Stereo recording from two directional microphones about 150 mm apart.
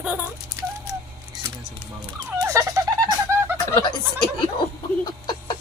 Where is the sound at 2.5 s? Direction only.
20° right (ahead or behind).